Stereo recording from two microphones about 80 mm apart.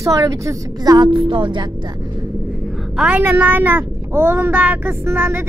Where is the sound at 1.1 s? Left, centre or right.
Right.